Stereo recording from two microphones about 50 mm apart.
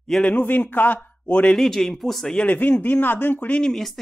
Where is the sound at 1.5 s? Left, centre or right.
Centre.